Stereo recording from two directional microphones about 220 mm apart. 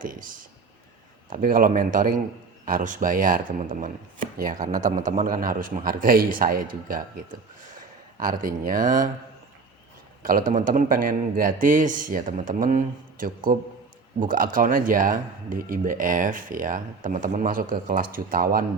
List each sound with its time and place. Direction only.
0.0 s speech: 40° right (ahead or behind)
1.3 s speech: 40° right (ahead or behind)
8.2 s speech: 40° right (ahead or behind)
10.2 s speech: 35° right (ahead or behind)